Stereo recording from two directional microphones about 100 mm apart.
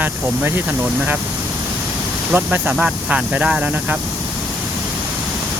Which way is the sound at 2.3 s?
15° right (ahead or behind).